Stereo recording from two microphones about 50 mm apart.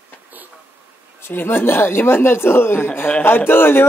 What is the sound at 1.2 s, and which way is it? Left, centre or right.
Speech, left.